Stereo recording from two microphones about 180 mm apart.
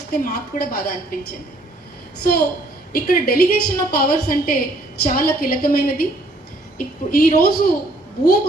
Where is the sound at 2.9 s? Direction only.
55° left (ahead or behind).